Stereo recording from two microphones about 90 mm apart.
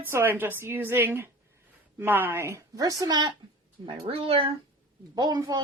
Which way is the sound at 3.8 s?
85° right.